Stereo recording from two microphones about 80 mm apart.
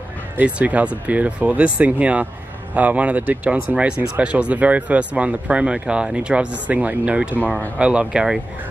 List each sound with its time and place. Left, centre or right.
0.4 s speech: centre